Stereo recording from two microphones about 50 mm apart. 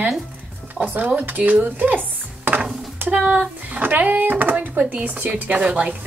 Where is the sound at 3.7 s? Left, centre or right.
Right.